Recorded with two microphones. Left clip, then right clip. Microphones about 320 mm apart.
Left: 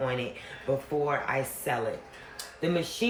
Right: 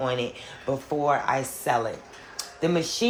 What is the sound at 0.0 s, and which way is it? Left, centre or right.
Speech, centre.